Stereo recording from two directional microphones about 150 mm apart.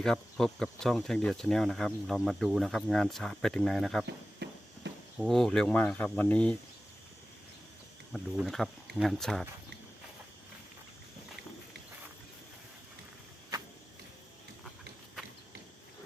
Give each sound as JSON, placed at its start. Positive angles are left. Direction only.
{"t": 0.0, "sound": "speech", "side_deg": 5}
{"t": 4.4, "sound": "walk", "side_deg": -90}
{"t": 5.1, "sound": "speech", "side_deg": 0}
{"t": 8.1, "sound": "speech", "side_deg": 0}